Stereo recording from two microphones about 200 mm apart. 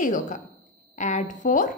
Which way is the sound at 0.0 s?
40° left (ahead or behind).